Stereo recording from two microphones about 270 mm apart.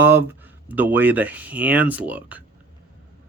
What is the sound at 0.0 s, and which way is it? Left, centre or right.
Speech, centre.